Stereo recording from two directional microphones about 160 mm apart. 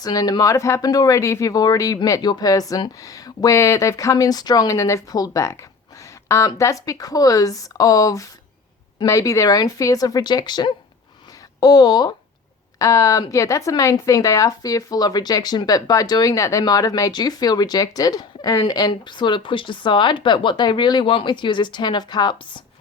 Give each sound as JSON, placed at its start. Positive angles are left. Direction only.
{"t": 0.0, "sound": "speech", "side_deg": 25}